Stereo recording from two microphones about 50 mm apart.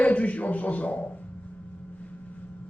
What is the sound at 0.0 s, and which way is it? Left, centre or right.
A man's voice, left.